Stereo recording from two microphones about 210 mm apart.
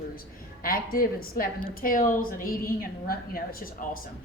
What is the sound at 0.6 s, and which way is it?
A woman's voice, 45° left (ahead or behind).